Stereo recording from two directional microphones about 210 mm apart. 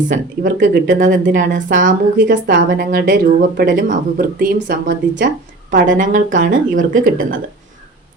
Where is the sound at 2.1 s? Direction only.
55° right (ahead or behind).